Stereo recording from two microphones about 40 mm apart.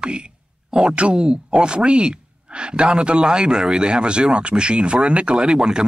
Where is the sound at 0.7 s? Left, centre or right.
Right.